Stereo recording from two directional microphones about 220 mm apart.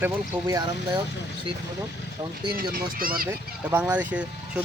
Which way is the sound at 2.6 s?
40° right (ahead or behind).